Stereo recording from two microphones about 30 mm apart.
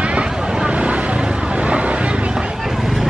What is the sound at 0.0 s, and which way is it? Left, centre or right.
Vehicle, right.